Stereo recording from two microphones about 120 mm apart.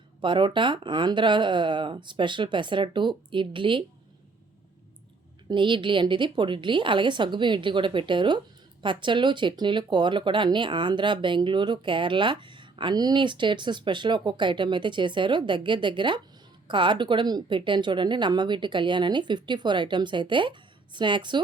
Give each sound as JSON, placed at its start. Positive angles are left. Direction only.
{"t": 0.2, "sound": "speech", "side_deg": -45}
{"t": 5.5, "sound": "a woman's voice", "side_deg": -45}